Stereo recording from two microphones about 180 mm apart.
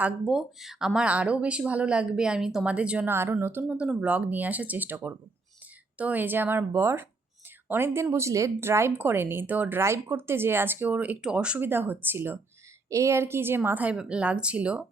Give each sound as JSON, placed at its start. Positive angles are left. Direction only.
{"t": 0.0, "sound": "speech", "side_deg": -5}